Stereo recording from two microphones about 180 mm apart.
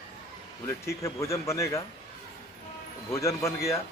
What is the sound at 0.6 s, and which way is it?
Speech, 15° left (ahead or behind).